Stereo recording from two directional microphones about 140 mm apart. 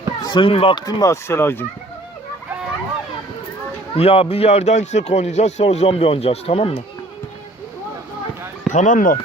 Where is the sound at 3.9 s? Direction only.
45° left (ahead or behind).